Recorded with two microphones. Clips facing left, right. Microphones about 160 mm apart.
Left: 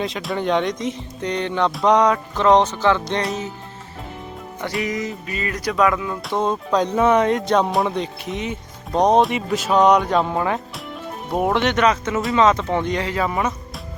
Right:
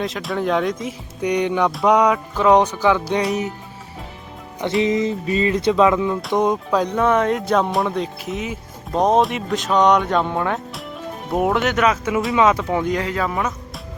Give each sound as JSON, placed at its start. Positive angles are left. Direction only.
{"t": 0.0, "sound": "speech", "side_deg": 0}
{"t": 1.7, "sound": "music", "side_deg": -5}
{"t": 4.6, "sound": "speech", "side_deg": -25}
{"t": 6.3, "sound": "music", "side_deg": -15}
{"t": 6.7, "sound": "speech", "side_deg": 0}